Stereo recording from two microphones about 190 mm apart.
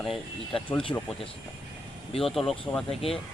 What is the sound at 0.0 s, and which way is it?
Speech, centre (ahead or behind).